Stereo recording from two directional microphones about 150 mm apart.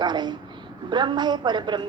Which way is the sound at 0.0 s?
30° right (ahead or behind).